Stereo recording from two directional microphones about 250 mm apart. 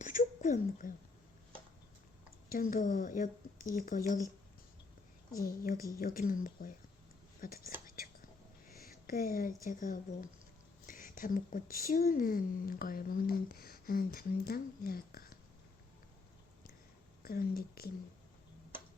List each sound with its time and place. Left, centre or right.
0.0 s a sound: left
2.5 s speech: left
5.4 s speech: left
8.7 s a sound: left
9.6 s speech: left
17.2 s speech: left